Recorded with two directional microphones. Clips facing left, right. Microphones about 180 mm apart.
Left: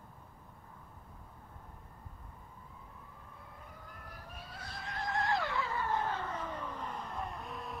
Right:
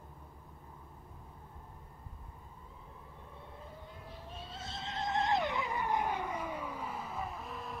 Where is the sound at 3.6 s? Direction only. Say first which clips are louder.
Right 3 dB; 25° right (ahead or behind); by 7.7 s centre (ahead or behind).